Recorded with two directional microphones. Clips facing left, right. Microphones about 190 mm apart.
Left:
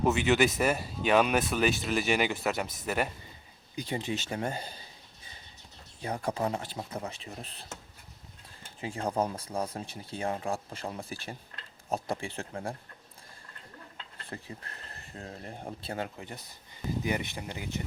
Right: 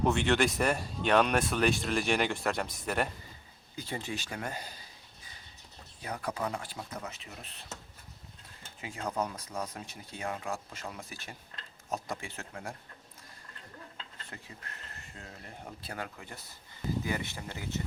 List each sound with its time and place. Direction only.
0.0 s speech: 5° left (ahead or behind)
3.8 s speech: 15° left (ahead or behind)
6.0 s speech: 30° left (ahead or behind)
8.8 s speech: 30° left (ahead or behind)
14.3 s speech: 35° left (ahead or behind); by 17.8 s 15° left (ahead or behind)